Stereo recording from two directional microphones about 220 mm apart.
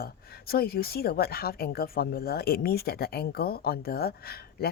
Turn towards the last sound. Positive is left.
turn(degrees=45)  # may be behind; listen again after turning